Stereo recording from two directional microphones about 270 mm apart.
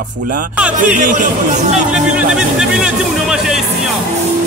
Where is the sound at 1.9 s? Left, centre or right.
Centre.